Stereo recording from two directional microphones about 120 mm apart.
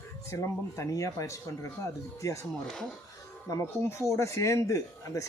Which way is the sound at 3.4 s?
25° left (ahead or behind).